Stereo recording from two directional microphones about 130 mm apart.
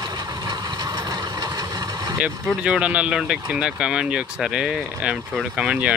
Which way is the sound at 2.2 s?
5° right (ahead or behind).